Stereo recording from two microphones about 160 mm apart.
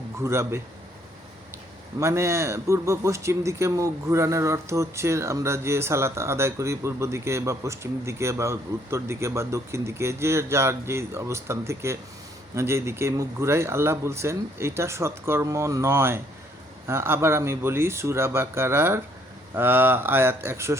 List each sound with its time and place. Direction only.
0.2 s a man's voice: 15° right (ahead or behind)
2.0 s a man's voice: 15° right (ahead or behind)